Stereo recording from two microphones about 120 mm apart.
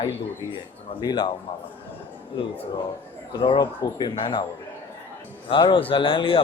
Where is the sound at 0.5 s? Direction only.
45° left (ahead or behind).